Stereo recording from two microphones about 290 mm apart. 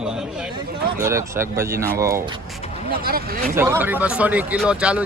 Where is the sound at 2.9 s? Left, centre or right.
Right.